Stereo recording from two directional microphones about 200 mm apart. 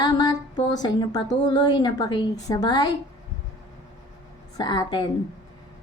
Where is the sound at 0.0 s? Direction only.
20° left (ahead or behind).